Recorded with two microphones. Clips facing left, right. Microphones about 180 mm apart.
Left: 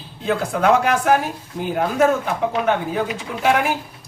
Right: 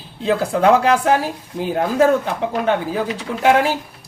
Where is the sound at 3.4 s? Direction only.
30° right (ahead or behind).